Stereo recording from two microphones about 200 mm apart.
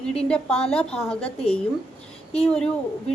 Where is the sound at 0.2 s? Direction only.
5° left (ahead or behind).